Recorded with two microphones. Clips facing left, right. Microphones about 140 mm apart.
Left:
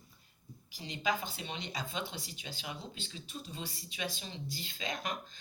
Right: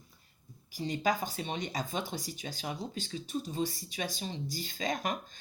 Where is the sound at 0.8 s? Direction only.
45° right (ahead or behind).